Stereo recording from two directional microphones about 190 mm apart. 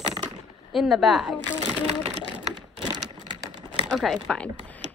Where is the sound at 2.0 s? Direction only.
30° right (ahead or behind).